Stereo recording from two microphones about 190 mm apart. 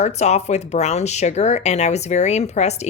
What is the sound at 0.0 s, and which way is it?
Speech, 35° left (ahead or behind).